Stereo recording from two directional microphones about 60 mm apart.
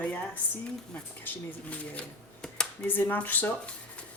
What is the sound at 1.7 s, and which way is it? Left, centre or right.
Speech, left.